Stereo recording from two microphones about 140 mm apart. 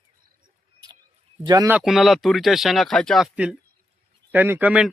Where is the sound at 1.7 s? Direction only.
5° right (ahead or behind).